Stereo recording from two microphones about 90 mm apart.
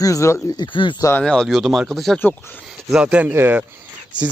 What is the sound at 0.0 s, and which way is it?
Speech, 35° left (ahead or behind).